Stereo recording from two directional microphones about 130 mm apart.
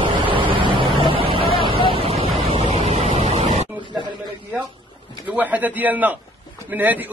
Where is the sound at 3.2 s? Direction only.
55° right (ahead or behind).